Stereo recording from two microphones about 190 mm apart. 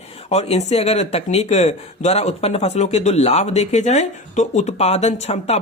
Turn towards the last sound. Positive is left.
turn(degrees=35)  # may be behind; listen again after turning